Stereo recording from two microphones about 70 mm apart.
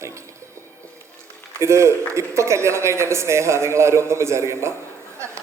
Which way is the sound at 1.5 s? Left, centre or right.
Right.